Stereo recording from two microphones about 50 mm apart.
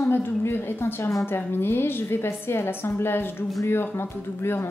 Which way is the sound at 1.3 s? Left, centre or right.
Left.